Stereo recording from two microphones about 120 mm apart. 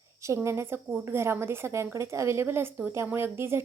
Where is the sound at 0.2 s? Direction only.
25° right (ahead or behind).